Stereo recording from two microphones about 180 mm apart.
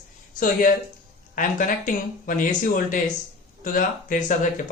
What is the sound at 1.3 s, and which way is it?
Speech, 50° left (ahead or behind).